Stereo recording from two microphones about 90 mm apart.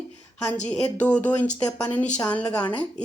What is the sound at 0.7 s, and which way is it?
Speech, 15° left (ahead or behind).